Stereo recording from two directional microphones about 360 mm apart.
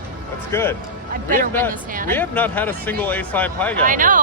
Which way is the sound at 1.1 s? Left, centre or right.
Right.